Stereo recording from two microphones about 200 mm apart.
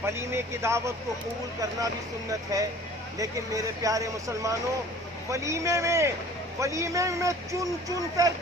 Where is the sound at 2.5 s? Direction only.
15° right (ahead or behind).